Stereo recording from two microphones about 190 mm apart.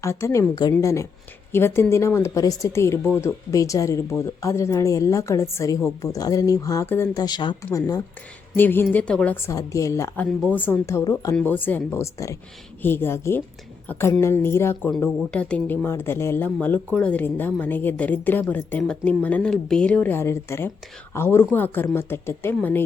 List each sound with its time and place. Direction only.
0.0 s speech: 15° left (ahead or behind)